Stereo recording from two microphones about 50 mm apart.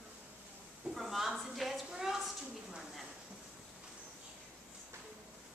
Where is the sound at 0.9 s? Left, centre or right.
Centre.